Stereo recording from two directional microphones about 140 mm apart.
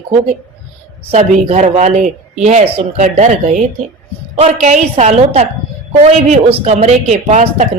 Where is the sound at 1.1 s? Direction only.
55° right (ahead or behind).